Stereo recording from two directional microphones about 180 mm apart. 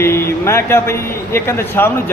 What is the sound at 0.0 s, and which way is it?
A man's voice, 15° left (ahead or behind).